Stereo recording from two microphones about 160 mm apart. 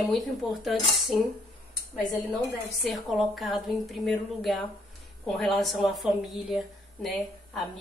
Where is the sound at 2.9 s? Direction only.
Centre (ahead or behind).